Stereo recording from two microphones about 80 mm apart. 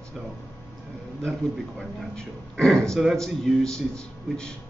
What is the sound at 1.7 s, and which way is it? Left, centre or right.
Speech, centre.